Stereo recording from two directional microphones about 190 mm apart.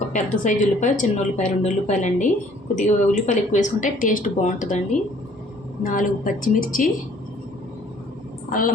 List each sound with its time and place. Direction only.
0.1 s a woman's voice: 40° left (ahead or behind)
5.8 s a woman's voice: 45° left (ahead or behind)
8.4 s a woman's voice: 45° left (ahead or behind)